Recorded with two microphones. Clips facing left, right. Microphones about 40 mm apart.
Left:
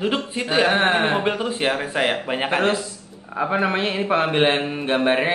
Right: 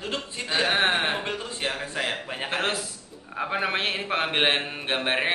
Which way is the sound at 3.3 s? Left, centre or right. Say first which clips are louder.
Left 6 dB; centre.